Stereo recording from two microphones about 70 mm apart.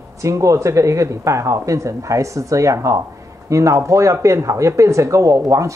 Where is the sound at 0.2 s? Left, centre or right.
Right.